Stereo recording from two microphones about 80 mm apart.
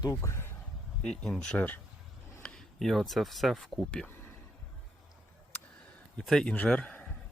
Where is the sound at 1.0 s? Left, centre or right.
Centre.